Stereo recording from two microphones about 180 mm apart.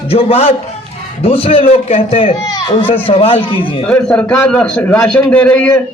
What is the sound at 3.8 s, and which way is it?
A man's voice, 5° left (ahead or behind).